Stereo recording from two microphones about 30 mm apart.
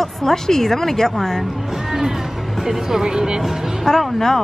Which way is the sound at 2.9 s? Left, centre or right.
Right.